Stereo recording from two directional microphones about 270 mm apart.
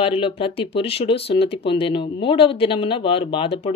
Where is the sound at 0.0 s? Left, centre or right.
Centre.